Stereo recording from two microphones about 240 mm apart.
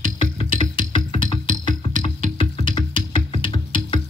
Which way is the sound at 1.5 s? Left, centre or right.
Right.